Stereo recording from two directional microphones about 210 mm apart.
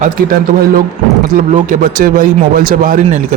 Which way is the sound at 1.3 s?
40° right (ahead or behind).